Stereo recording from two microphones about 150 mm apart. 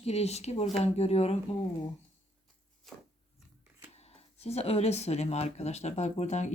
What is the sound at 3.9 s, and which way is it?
Speech, 45° left (ahead or behind).